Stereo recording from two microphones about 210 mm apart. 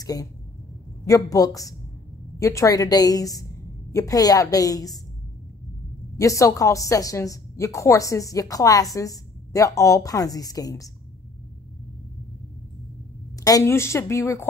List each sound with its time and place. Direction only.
0.0 s a woman's voice: 15° left (ahead or behind)
6.1 s a woman's voice: 15° left (ahead or behind)
13.4 s a woman's voice: 15° left (ahead or behind)